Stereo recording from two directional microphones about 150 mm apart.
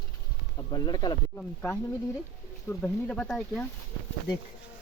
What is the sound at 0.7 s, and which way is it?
Speech, 25° left (ahead or behind).